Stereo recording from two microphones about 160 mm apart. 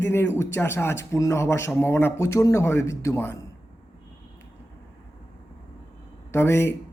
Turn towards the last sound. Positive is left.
turn(degrees=15)  # may be behind; listen again after turning